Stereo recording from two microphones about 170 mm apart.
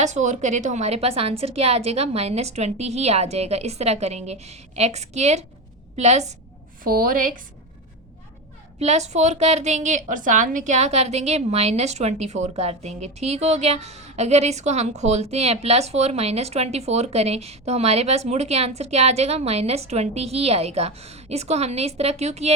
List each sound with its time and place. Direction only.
0.0 s a woman's voice: 45° right (ahead or behind)
6.8 s speech: 55° right (ahead or behind)
8.8 s a woman's voice: 40° right (ahead or behind)